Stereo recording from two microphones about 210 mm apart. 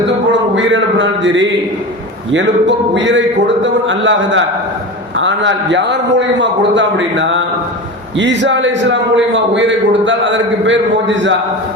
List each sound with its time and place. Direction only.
0.5 s a man's voice: 65° right (ahead or behind)